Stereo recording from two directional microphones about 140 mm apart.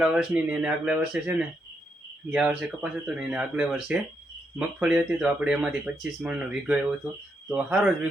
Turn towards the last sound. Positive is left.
turn(degrees=-5)  # may be behind; listen again after turning